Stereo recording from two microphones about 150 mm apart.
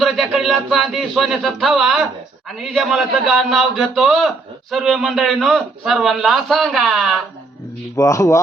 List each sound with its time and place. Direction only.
0.0 s a sound: centre (ahead or behind)
2.6 s a man's voice: centre (ahead or behind)
7.9 s speech: 20° left (ahead or behind)